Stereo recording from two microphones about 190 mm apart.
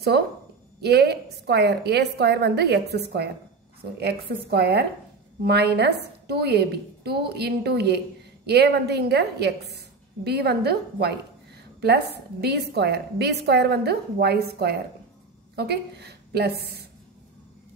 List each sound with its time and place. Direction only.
0.7 s a woman's voice: 60° right (ahead or behind)
4.0 s a woman's voice: 55° right (ahead or behind)